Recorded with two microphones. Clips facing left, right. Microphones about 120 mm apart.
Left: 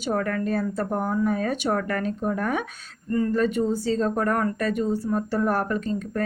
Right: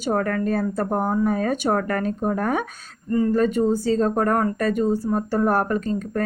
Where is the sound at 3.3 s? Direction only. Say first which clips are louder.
Right 4 dB; 45° right (ahead or behind).